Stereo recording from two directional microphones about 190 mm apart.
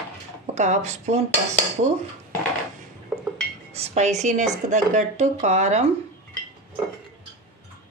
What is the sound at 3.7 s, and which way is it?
Speech, 35° right (ahead or behind).